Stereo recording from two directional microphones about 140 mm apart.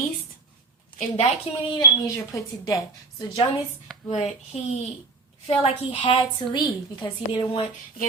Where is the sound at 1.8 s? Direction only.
25° left (ahead or behind).